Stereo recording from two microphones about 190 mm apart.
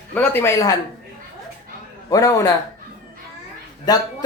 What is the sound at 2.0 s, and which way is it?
Speech, 20° left (ahead or behind).